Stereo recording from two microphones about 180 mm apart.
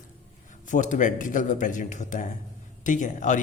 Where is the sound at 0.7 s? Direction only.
45° left (ahead or behind).